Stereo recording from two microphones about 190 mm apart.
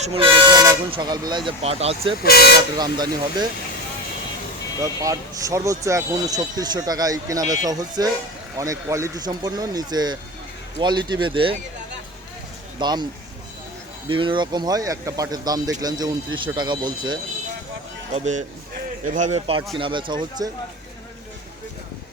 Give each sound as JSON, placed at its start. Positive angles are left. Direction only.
{"t": 0.0, "sound": "speech", "side_deg": -30}
{"t": 2.2, "sound": "speech", "side_deg": 55}
{"t": 2.7, "sound": "speech", "side_deg": -20}
{"t": 4.8, "sound": "speech", "side_deg": -15}
{"t": 12.8, "sound": "speech", "side_deg": -20}
{"t": 14.1, "sound": "speech", "side_deg": -25}
{"t": 18.1, "sound": "a man's voice", "side_deg": -40}